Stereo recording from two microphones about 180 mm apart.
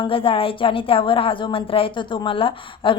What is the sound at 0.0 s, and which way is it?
A woman's voice, 30° left (ahead or behind).